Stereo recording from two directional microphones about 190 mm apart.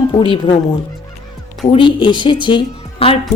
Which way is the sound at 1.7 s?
25° left (ahead or behind).